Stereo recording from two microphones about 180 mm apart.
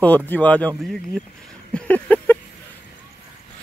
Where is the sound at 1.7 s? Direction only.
10° left (ahead or behind).